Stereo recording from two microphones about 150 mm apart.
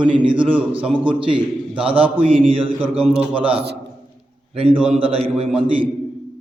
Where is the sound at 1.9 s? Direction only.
40° right (ahead or behind).